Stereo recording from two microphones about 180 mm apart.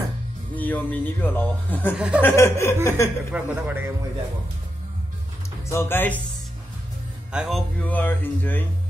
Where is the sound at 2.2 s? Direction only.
15° left (ahead or behind).